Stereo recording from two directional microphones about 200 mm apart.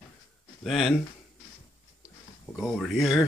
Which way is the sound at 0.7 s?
Centre (ahead or behind).